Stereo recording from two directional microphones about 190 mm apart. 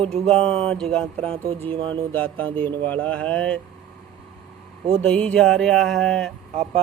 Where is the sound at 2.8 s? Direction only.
5° left (ahead or behind).